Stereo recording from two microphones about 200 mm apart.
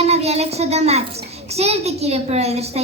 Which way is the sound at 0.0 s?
30° right (ahead or behind).